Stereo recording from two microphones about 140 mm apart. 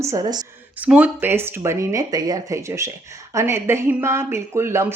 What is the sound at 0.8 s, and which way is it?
Speech, 10° right (ahead or behind).